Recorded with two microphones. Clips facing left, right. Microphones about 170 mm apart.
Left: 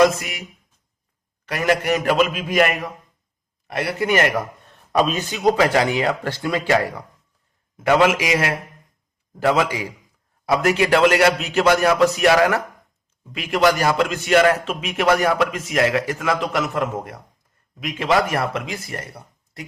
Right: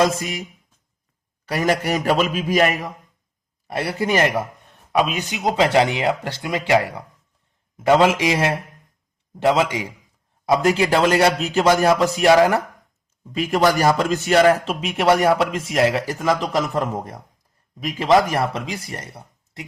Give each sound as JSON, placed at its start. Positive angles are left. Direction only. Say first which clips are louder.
{"t": 0.1, "sound": "speech", "louder": "right 3 dB", "side_deg": -30}
{"t": 1.5, "sound": "a man's voice", "louder": "left 1 dB", "side_deg": -35}
{"t": 3.7, "sound": "speech", "louder": "even", "side_deg": -30}
{"t": 4.9, "sound": "speech", "louder": "left 1 dB", "side_deg": -10}
{"t": 13.7, "sound": "a man's voice", "louder": "right 2 dB", "side_deg": -40}